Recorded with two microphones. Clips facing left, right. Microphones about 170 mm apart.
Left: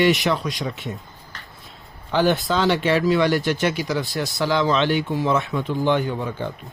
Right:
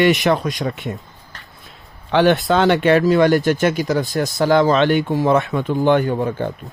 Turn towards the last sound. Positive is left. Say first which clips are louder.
# right 6 dB
turn(degrees=-50)  # may be behind; listen again after turning